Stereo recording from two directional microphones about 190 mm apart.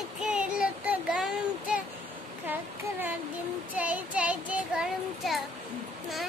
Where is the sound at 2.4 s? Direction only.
10° right (ahead or behind).